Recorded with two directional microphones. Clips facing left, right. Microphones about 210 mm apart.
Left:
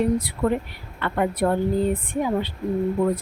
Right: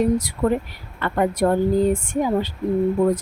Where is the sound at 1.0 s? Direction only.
40° right (ahead or behind).